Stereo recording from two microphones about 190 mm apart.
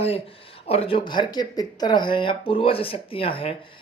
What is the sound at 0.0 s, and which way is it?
Speech, 30° left (ahead or behind).